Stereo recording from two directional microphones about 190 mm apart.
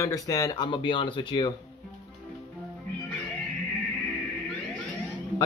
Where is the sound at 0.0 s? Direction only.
20° left (ahead or behind).